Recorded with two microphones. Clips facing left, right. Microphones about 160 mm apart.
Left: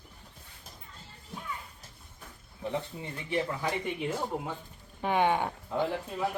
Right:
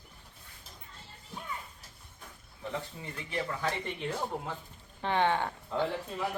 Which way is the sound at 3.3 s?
15° left (ahead or behind).